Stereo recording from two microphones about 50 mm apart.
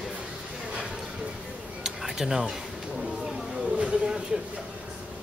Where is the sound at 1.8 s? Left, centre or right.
Centre.